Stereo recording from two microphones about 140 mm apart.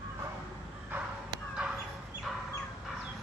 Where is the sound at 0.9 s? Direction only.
15° right (ahead or behind).